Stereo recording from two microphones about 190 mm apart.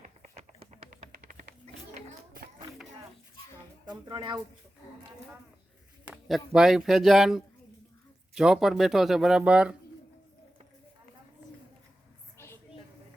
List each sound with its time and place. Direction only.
0.0 s tap: 35° right (ahead or behind)
1.1 s music: 45° right (ahead or behind)
3.8 s speech: 25° right (ahead or behind)
6.1 s a sound: centre (ahead or behind)
6.5 s speech: 5° right (ahead or behind)